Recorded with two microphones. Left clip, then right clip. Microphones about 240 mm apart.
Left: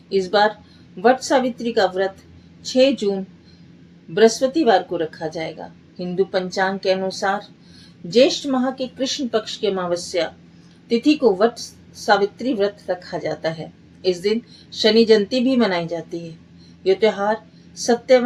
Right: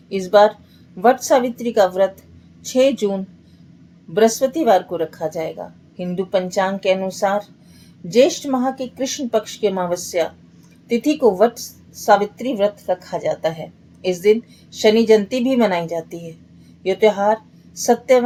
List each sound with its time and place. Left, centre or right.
0.1 s a woman's voice: right
4.1 s a woman's voice: right